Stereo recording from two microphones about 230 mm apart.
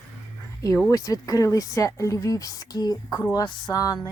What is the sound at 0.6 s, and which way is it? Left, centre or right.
Speech, centre.